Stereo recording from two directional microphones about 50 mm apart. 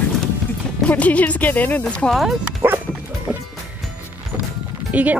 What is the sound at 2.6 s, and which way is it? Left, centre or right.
Bow-wow, right.